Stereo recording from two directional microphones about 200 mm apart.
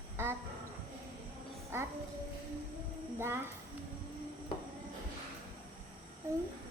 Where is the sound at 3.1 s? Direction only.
10° right (ahead or behind).